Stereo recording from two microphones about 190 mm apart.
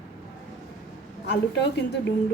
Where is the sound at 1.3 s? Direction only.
65° left (ahead or behind).